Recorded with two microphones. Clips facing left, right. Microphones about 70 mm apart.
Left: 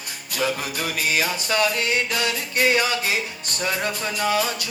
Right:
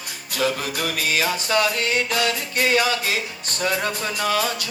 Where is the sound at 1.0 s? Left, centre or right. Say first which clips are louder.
Left 1 dB; left.